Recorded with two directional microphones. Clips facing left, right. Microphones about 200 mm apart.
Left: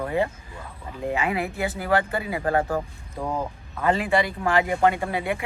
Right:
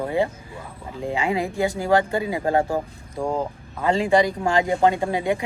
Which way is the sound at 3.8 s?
30° right (ahead or behind).